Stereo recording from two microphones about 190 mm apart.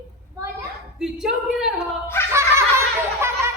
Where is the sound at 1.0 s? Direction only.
5° right (ahead or behind).